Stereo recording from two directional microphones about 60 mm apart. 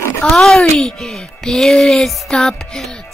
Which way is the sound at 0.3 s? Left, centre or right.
Centre.